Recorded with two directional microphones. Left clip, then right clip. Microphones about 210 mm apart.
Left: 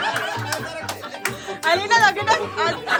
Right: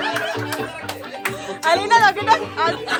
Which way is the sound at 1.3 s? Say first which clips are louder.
Right 2 dB; 10° left (ahead or behind).